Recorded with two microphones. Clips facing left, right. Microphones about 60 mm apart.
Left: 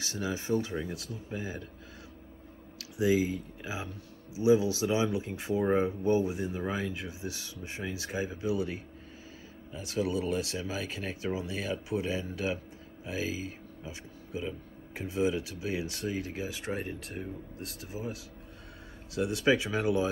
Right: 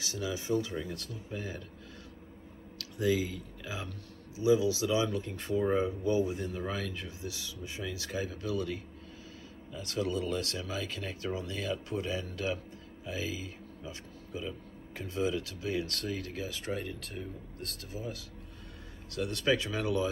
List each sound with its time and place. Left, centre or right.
0.1 s speech: left; by 1.6 s centre
2.8 s speech: centre
4.4 s speech: left
5.1 s speech: centre
5.7 s speech: left
6.3 s speech: centre
7.2 s speech: left; by 16.3 s centre
16.3 s speech: left